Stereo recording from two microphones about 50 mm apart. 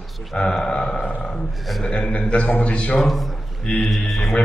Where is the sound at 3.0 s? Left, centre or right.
Centre.